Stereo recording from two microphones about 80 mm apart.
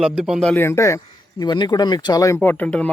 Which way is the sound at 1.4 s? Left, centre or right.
Left.